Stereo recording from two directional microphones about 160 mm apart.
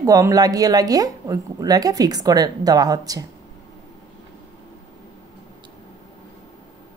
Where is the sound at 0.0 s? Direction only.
20° right (ahead or behind).